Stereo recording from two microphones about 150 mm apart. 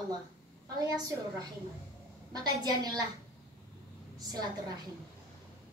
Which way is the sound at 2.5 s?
30° right (ahead or behind).